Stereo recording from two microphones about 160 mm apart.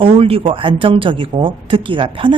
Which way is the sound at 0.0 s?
35° right (ahead or behind).